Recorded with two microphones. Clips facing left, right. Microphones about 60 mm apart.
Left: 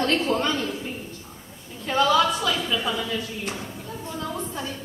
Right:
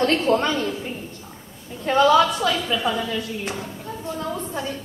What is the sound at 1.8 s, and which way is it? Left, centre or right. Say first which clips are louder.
A woman's voice: right 4 dB; right.